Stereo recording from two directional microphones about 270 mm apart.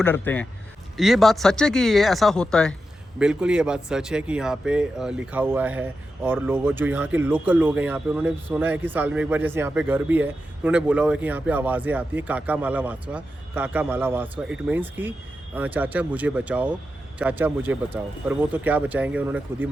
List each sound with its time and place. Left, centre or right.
0.0 s speech: centre